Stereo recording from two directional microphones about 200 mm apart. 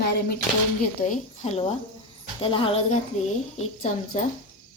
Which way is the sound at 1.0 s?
40° left (ahead or behind).